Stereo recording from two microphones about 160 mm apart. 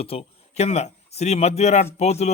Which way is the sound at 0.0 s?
35° left (ahead or behind).